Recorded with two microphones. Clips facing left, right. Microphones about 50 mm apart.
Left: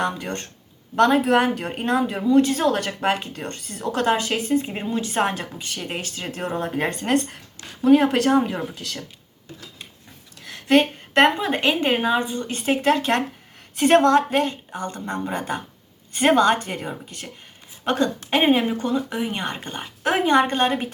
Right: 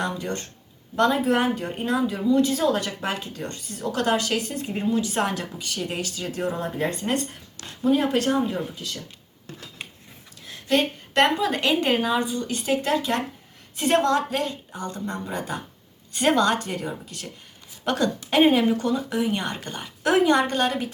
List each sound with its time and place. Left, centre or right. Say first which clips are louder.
0.0 s speech: left 2 dB; left
0.9 s speech: left 4 dB; left
7.0 s speech: left 4 dB; left
10.4 s speech: left 5 dB; left